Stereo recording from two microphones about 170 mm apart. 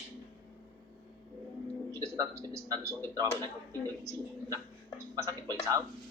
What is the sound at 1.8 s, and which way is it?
A man's voice, 15° right (ahead or behind).